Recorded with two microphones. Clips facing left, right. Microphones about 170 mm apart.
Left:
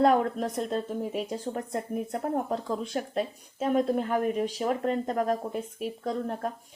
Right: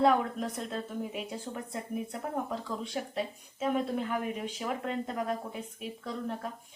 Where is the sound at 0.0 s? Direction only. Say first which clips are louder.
Left 3 dB; 45° left (ahead or behind).